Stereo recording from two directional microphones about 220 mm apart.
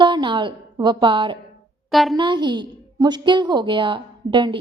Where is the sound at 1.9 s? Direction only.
Centre (ahead or behind).